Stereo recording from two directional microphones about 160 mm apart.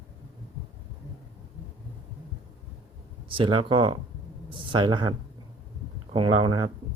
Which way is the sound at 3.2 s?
35° right (ahead or behind).